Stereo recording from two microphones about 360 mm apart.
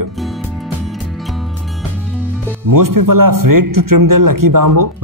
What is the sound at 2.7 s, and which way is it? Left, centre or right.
A man's voice, right.